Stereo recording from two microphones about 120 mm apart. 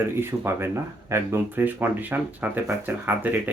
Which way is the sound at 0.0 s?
20° right (ahead or behind).